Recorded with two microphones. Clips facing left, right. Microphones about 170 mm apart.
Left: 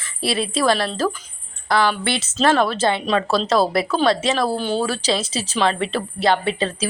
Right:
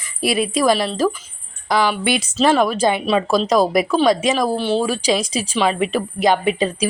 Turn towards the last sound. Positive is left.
turn(degrees=-15)  # may be behind; listen again after turning